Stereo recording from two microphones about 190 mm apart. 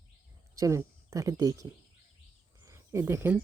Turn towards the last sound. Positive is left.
turn(degrees=-15)  # may be behind; listen again after turning